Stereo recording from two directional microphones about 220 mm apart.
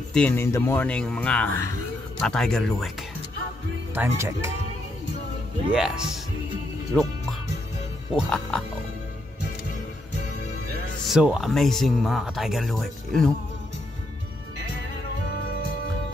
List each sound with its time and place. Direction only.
0.1 s speech: 10° left (ahead or behind)
3.9 s speech: 10° right (ahead or behind)
5.7 s speech: 5° right (ahead or behind)
6.9 s music: centre (ahead or behind)
8.3 s speech: 5° left (ahead or behind)
11.1 s speech: centre (ahead or behind)